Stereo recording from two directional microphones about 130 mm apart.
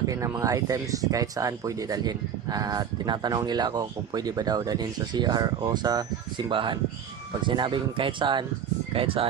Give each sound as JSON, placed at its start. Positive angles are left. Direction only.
{"t": 0.0, "sound": "speech", "side_deg": -25}